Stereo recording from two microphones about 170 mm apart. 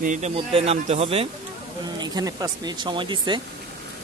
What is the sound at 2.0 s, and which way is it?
Speech, 20° right (ahead or behind).